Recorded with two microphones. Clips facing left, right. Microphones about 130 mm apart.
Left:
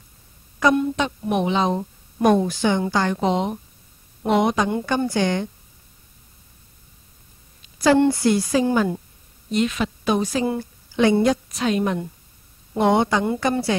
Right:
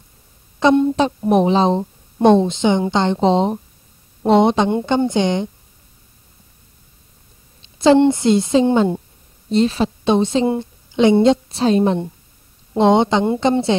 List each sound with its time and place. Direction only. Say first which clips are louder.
0.6 s a woman's voice: right 5 dB; 25° right (ahead or behind)
7.6 s a woman's voice: right 5 dB; 25° right (ahead or behind)